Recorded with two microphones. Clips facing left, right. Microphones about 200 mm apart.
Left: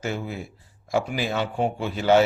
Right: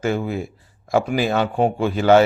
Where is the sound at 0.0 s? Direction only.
55° right (ahead or behind).